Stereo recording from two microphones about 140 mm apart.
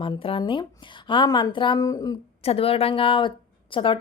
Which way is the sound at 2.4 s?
45° left (ahead or behind).